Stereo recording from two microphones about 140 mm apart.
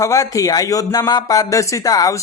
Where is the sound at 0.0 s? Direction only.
25° left (ahead or behind).